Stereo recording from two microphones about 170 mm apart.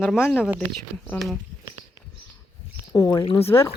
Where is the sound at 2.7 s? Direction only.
20° left (ahead or behind).